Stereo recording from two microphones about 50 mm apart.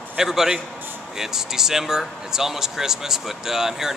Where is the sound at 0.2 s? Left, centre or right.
Centre.